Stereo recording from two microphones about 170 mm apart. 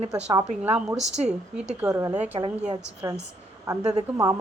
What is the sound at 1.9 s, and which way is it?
Speech, 20° right (ahead or behind).